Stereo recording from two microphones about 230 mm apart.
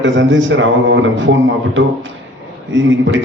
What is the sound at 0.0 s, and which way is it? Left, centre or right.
A woman's voice, right.